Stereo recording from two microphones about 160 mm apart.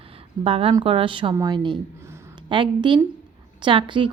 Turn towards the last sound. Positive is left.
turn(degrees=-30)  # may be behind; listen again after turning